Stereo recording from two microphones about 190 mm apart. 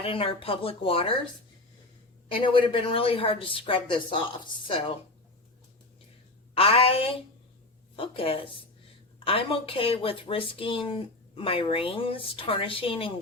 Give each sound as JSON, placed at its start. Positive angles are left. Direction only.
{"t": 0.0, "sound": "speech", "side_deg": 30}
{"t": 2.4, "sound": "speech", "side_deg": 25}
{"t": 6.5, "sound": "a woman's voice", "side_deg": 30}